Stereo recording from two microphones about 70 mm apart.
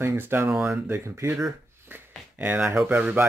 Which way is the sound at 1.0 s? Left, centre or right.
Right.